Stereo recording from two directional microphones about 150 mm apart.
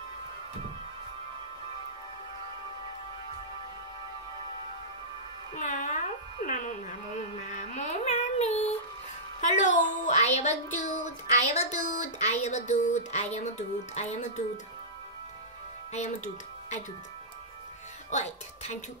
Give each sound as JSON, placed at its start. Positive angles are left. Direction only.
{"t": 5.6, "sound": "a sound", "side_deg": 55}
{"t": 9.4, "sound": "music", "side_deg": 55}
{"t": 10.8, "sound": "a woman's voice", "side_deg": 55}
{"t": 18.1, "sound": "music", "side_deg": 50}